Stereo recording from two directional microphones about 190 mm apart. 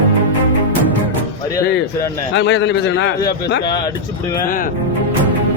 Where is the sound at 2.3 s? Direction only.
70° left (ahead or behind).